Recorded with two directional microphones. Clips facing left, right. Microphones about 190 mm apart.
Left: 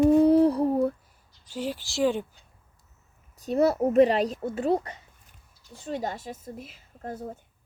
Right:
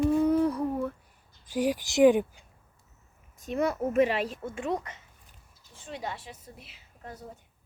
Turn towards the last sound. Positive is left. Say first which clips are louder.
# left 8 dB
turn(degrees=45)  # may be behind; listen again after turning